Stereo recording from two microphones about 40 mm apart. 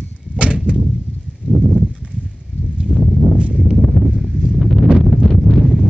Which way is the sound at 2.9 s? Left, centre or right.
Right.